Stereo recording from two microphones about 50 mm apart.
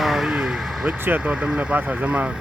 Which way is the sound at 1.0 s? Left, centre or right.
Right.